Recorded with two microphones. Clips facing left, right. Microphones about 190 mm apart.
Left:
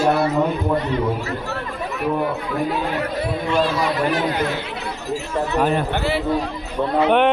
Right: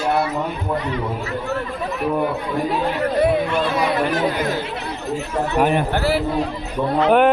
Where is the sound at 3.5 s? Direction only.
60° right (ahead or behind).